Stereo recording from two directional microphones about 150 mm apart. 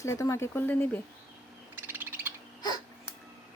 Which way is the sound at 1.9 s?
15° right (ahead or behind).